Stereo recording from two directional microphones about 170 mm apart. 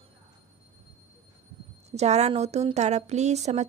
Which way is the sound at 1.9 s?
40° right (ahead or behind).